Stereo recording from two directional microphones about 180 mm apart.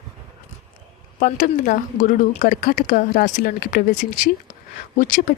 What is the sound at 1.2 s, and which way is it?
A woman's voice, 50° left (ahead or behind).